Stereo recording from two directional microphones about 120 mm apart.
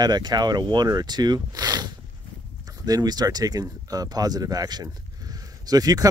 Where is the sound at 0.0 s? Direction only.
35° right (ahead or behind).